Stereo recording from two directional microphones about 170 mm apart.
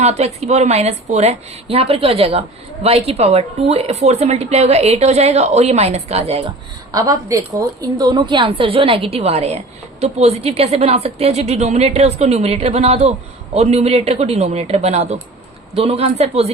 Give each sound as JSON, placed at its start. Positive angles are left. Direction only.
{"t": 0.0, "sound": "a woman's voice", "side_deg": -40}
{"t": 6.9, "sound": "a woman's voice", "side_deg": -20}